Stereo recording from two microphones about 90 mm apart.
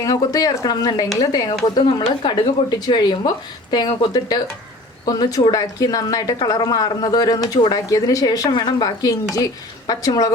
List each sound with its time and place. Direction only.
0.0 s speech: 40° left (ahead or behind)
1.8 s speech: 60° left (ahead or behind)
5.5 s speech: 40° left (ahead or behind)